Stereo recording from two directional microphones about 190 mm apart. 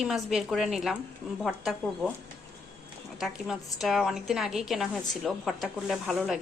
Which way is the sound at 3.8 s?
Centre (ahead or behind).